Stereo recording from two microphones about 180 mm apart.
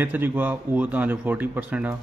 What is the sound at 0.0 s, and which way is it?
A man's voice, 10° right (ahead or behind).